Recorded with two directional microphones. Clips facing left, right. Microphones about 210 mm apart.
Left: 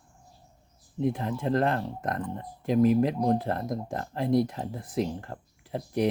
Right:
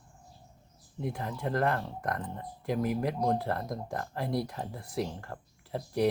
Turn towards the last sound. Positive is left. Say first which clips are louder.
# left 1 dB
turn(degrees=20)  # may be behind; listen again after turning